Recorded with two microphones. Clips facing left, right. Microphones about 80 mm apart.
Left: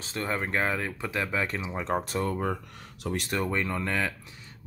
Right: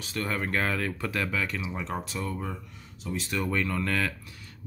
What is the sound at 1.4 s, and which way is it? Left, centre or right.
Speech, left.